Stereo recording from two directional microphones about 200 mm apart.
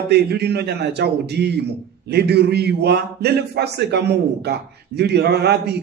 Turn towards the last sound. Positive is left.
turn(degrees=-55)  # may be behind; listen again after turning